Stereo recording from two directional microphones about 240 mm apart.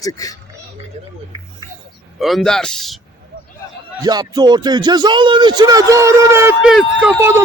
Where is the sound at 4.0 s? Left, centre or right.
Centre.